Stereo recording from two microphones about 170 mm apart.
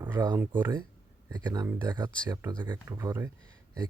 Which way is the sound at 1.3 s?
25° right (ahead or behind).